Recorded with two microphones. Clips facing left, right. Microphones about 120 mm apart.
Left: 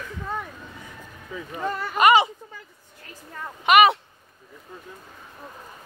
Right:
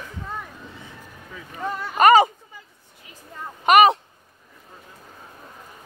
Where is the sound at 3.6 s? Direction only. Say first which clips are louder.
Right 2 dB; 40° right (ahead or behind).